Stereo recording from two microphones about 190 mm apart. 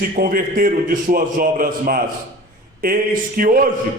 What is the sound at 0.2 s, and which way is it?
Speech, 50° right (ahead or behind).